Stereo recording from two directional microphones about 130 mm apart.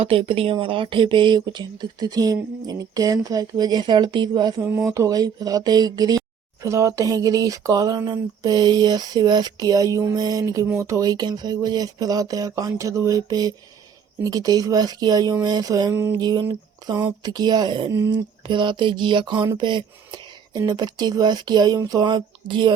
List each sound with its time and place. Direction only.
0.0 s speech: 45° right (ahead or behind)
4.6 s speech: 20° right (ahead or behind); by 22.7 s 35° right (ahead or behind)